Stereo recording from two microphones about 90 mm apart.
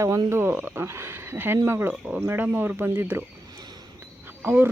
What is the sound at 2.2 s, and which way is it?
Speech, 25° right (ahead or behind).